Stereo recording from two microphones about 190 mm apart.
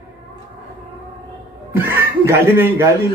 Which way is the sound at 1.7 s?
10° right (ahead or behind).